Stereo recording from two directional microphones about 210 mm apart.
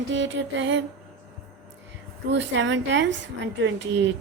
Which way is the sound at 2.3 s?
60° right (ahead or behind).